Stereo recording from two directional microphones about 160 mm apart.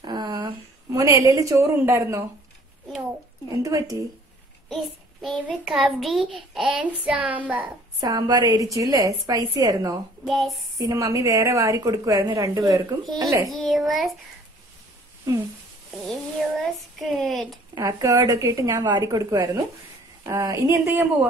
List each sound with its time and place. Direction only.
0.0 s a sound: 25° right (ahead or behind)
3.6 s a woman's voice: 20° right (ahead or behind)
4.6 s child singing: centre (ahead or behind)
5.7 s speech: 5° right (ahead or behind)
8.0 s a woman's voice: 20° right (ahead or behind)
10.2 s speech: centre (ahead or behind)
10.8 s a woman's voice: 20° right (ahead or behind)
13.5 s speech: centre (ahead or behind)
16.1 s speech: centre (ahead or behind)
17.7 s a woman's voice: 20° right (ahead or behind)